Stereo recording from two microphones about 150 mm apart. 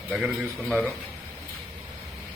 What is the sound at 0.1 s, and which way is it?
Speech, 5° right (ahead or behind).